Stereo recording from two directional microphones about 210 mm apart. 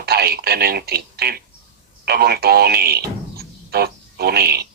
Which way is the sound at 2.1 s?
50° right (ahead or behind).